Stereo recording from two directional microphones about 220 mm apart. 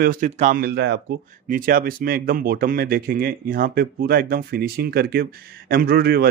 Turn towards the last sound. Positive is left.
turn(degrees=-45)  # may be behind; listen again after turning